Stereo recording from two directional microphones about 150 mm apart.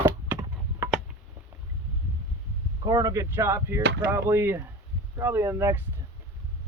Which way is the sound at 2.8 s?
25° right (ahead or behind).